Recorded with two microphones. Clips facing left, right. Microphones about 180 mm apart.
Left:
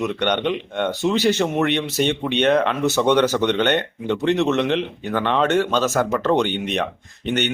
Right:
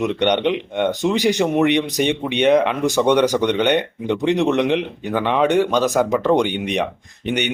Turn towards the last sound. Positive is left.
turn(degrees=-10)  # may be behind; listen again after turning